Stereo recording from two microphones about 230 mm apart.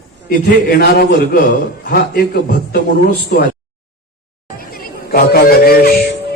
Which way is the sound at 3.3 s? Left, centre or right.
Left.